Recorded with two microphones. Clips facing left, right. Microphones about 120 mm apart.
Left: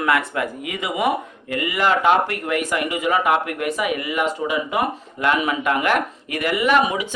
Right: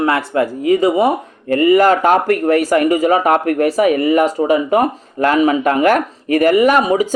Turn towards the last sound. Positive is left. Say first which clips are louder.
# right 6 dB
turn(degrees=-40)  # may be behind; listen again after turning